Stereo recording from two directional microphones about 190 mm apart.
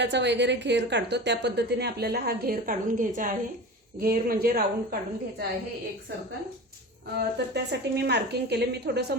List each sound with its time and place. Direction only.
0.0 s a woman's voice: 65° right (ahead or behind)
7.2 s a woman's voice: 60° right (ahead or behind)